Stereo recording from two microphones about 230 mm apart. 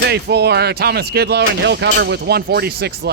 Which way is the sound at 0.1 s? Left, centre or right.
Right.